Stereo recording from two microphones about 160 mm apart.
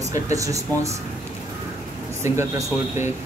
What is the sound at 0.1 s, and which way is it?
Speech, 20° right (ahead or behind).